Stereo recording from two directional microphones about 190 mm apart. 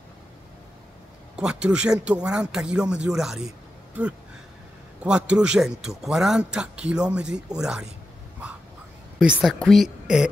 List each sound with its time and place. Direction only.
1.3 s speech: 5° right (ahead or behind)
5.3 s speech: 5° right (ahead or behind)
9.2 s speech: centre (ahead or behind)